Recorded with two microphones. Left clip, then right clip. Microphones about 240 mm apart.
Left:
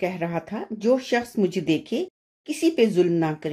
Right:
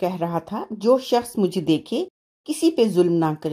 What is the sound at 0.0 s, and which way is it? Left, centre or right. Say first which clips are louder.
Speech: right 3 dB; right.